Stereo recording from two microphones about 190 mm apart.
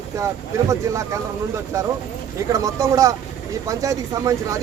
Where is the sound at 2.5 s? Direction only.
15° right (ahead or behind).